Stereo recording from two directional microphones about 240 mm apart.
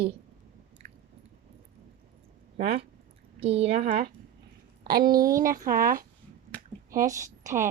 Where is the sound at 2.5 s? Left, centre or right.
Right.